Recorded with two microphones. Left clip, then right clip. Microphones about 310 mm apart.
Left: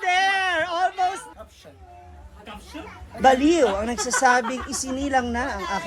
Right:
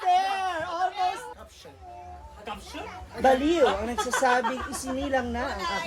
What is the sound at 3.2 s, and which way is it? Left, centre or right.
Speech, left.